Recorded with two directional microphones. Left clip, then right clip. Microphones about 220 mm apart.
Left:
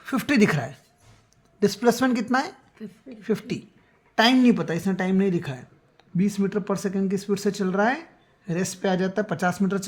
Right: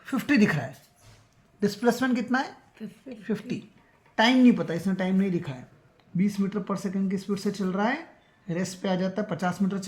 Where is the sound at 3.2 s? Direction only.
40° left (ahead or behind).